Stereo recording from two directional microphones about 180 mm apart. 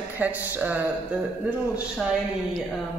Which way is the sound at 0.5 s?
10° right (ahead or behind).